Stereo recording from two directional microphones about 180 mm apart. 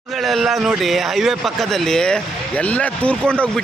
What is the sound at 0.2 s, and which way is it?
A man's voice, centre (ahead or behind).